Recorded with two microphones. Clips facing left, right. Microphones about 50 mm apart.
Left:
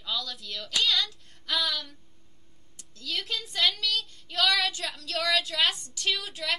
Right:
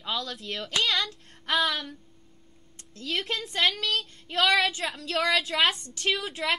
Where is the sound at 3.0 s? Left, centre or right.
Right.